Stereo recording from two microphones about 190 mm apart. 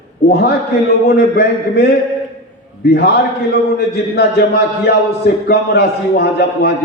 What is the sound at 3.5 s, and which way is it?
A man's voice, 60° left (ahead or behind).